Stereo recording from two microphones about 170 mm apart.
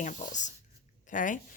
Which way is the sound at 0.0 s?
45° left (ahead or behind).